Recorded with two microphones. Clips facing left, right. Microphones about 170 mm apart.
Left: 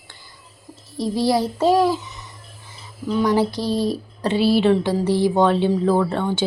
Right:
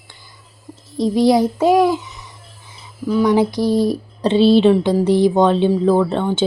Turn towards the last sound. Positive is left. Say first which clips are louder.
# right 4 dB
turn(degrees=-20)  # may be behind; listen again after turning